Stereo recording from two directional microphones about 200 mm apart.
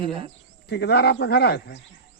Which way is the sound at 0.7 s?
55° left (ahead or behind).